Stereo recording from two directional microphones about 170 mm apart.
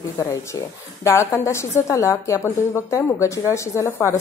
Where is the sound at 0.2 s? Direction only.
15° left (ahead or behind).